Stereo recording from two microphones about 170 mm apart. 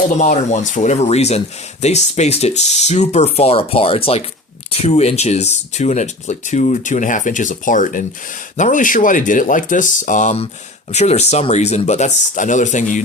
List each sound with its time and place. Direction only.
0.2 s speech: 45° left (ahead or behind)